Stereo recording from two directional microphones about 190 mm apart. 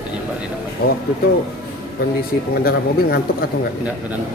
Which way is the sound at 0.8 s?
55° left (ahead or behind).